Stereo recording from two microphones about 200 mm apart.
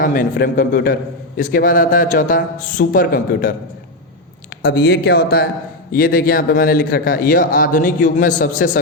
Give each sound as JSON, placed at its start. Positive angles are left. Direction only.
{"t": 0.0, "sound": "a man's voice", "side_deg": 45}